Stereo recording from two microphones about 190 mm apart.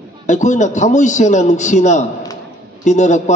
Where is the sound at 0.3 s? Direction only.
40° left (ahead or behind).